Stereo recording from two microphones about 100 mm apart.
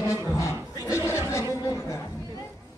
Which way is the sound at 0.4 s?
30° left (ahead or behind).